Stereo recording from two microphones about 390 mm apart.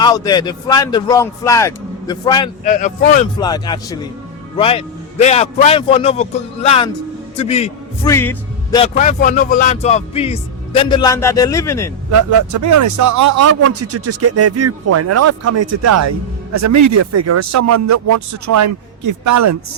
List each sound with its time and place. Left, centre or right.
0.0 s a man's voice: centre
3.3 s a man's voice: centre
12.1 s a man's voice: right